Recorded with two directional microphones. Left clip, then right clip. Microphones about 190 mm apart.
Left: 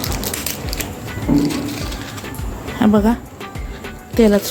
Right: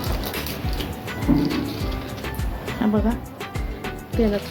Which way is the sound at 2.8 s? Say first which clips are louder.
Left 8 dB; 40° left (ahead or behind).